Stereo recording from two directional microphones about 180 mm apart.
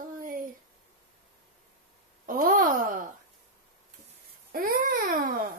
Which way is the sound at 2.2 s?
50° right (ahead or behind).